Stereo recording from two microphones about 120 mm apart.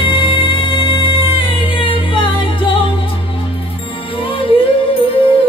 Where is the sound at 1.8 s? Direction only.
45° left (ahead or behind).